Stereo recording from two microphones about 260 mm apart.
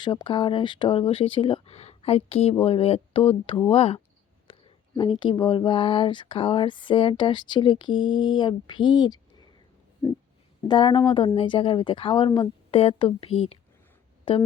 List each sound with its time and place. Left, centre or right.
0.0 s speech: centre
10.7 s speech: centre